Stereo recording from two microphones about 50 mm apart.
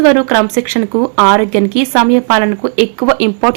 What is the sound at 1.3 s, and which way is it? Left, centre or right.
Speech, right.